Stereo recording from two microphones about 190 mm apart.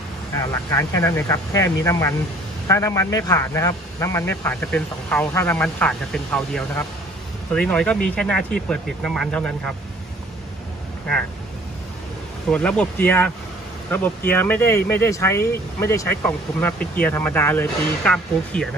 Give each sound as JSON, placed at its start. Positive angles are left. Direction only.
{"t": 0.4, "sound": "a man's voice", "side_deg": 15}
{"t": 12.4, "sound": "a man's voice", "side_deg": 5}